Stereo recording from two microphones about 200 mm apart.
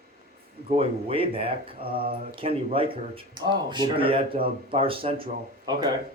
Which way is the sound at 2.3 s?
30° right (ahead or behind).